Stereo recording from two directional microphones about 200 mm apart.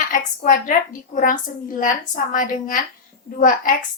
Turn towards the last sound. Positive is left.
turn(degrees=40)  # may be behind; listen again after turning